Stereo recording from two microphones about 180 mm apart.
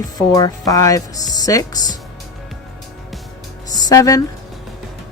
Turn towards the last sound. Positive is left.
turn(degrees=20)  # may be behind; listen again after turning